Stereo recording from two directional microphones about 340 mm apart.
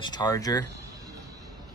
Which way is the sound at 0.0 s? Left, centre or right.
Centre.